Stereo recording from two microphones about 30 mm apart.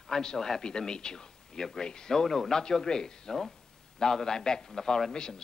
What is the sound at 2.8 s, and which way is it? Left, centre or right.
A man's voice, left.